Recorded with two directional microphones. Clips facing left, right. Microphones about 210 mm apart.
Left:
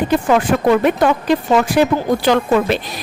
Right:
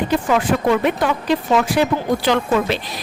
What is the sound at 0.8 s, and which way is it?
A woman's voice, 50° left (ahead or behind).